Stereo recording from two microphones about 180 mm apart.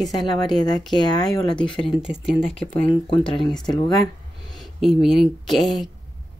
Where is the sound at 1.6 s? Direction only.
30° left (ahead or behind).